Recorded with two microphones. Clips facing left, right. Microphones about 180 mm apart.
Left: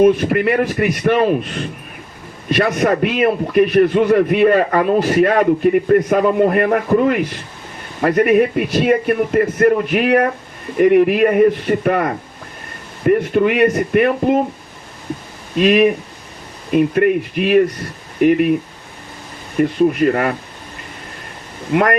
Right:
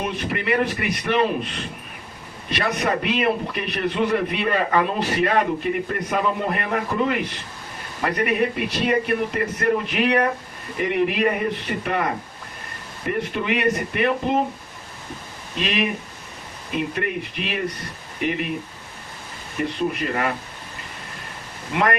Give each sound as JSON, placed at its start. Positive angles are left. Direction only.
{"t": 0.0, "sound": "a man's voice", "side_deg": 45}
{"t": 13.1, "sound": "a man's voice", "side_deg": 50}
{"t": 15.5, "sound": "a man's voice", "side_deg": 50}
{"t": 19.6, "sound": "a man's voice", "side_deg": 45}